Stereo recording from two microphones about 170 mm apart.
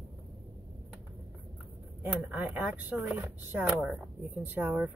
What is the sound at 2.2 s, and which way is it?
Speech, 10° right (ahead or behind).